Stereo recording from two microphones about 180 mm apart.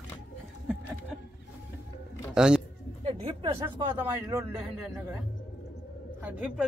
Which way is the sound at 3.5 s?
25° right (ahead or behind).